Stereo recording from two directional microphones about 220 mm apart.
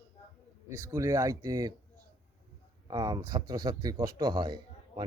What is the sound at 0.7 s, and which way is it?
Speech, 15° right (ahead or behind).